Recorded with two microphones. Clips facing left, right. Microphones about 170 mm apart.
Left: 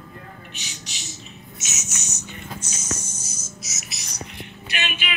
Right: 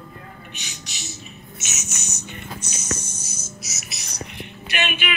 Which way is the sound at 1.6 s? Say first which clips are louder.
Right 1 dB; 60° right (ahead or behind).